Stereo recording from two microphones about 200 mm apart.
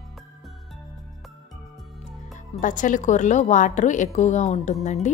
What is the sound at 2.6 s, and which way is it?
A woman's voice, 40° left (ahead or behind).